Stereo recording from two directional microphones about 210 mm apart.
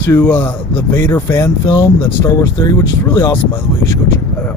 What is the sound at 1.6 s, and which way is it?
Speech, 25° left (ahead or behind).